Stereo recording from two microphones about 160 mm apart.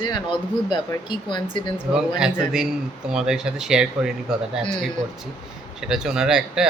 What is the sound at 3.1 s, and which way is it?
Speech, 5° right (ahead or behind).